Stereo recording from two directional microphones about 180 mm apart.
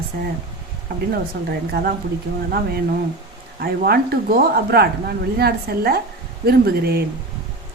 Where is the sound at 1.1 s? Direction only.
55° right (ahead or behind).